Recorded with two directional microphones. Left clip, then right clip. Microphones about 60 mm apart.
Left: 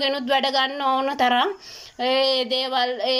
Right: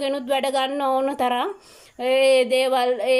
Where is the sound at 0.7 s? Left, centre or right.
Right.